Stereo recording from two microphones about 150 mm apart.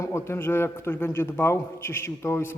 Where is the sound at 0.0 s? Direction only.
15° left (ahead or behind).